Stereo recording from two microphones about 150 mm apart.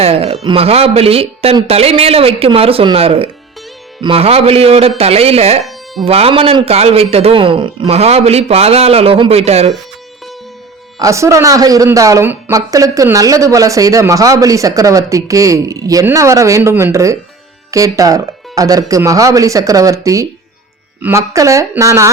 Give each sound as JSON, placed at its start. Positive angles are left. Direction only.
{"t": 0.0, "sound": "a man's voice", "side_deg": -40}
{"t": 5.6, "sound": "music", "side_deg": 0}
{"t": 6.1, "sound": "a man's voice", "side_deg": -40}
{"t": 11.0, "sound": "speech", "side_deg": -20}